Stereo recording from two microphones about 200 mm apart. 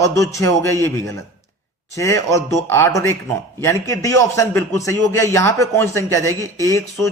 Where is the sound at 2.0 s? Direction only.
15° left (ahead or behind).